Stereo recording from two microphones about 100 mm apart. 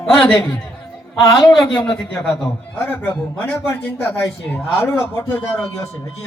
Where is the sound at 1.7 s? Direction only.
5° left (ahead or behind).